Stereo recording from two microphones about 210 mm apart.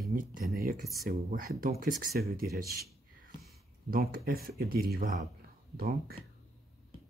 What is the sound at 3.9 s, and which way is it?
Speech, 45° right (ahead or behind).